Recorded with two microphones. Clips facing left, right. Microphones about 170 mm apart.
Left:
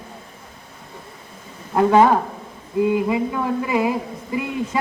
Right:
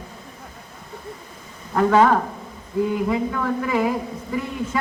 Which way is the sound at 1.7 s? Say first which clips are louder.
Left 2 dB; 15° left (ahead or behind).